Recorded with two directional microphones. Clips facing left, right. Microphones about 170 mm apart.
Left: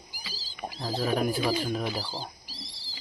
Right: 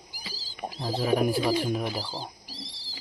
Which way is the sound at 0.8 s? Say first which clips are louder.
Right 3 dB; 15° right (ahead or behind).